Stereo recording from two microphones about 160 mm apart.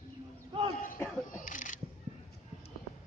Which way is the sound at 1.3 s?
55° left (ahead or behind).